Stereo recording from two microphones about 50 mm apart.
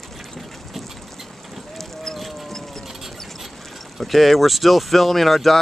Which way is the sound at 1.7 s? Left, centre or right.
Centre.